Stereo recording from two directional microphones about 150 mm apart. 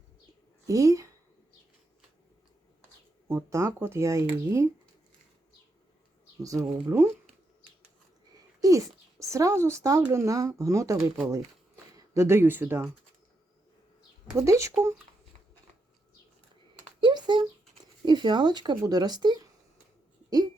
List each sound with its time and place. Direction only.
0.7 s speech: 20° right (ahead or behind)
3.2 s speech: 20° right (ahead or behind)
6.4 s speech: 20° right (ahead or behind)
8.6 s a child's voice: 20° right (ahead or behind)
11.9 s speech: 20° right (ahead or behind)
14.3 s speech: 20° right (ahead or behind)
17.0 s a sound: 30° right (ahead or behind)
18.0 s speech: 30° right (ahead or behind)